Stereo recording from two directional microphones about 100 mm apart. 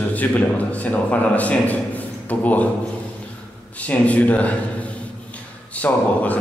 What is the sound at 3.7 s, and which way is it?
Speech, 15° left (ahead or behind).